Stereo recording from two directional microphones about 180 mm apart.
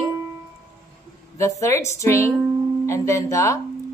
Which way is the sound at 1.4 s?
15° left (ahead or behind).